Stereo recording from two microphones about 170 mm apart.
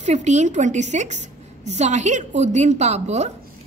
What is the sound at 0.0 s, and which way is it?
A woman's voice, 45° right (ahead or behind).